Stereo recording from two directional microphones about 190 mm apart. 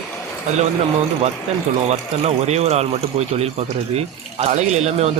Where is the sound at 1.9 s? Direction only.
35° right (ahead or behind).